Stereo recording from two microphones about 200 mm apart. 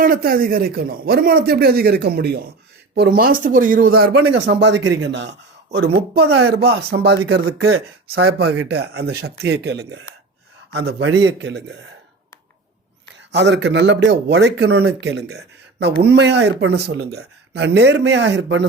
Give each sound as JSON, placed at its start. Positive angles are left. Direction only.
{"t": 0.0, "sound": "a man's voice", "side_deg": -45}
{"t": 4.2, "sound": "speech", "side_deg": -65}
{"t": 5.7, "sound": "a man's voice", "side_deg": -50}
{"t": 6.1, "sound": "speech", "side_deg": -90}
{"t": 6.6, "sound": "speech", "side_deg": -55}
{"t": 8.6, "sound": "speech", "side_deg": -55}
{"t": 13.3, "sound": "speech", "side_deg": -60}